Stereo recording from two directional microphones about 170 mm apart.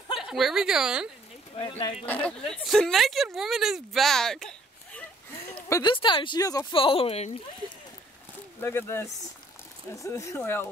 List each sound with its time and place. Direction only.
0.2 s speech: centre (ahead or behind)
1.6 s speech: 30° left (ahead or behind)
2.0 s speech: 10° left (ahead or behind)
5.7 s speech: 25° left (ahead or behind)
8.5 s speech: 15° left (ahead or behind)